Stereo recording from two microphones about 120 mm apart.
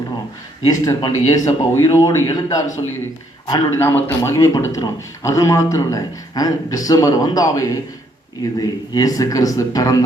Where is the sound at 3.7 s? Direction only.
20° left (ahead or behind).